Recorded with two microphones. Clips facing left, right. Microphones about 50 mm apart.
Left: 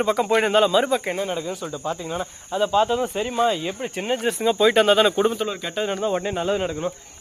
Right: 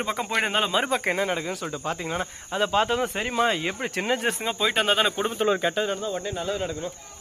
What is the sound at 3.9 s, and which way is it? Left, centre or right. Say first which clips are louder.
Speech: left 1 dB; right.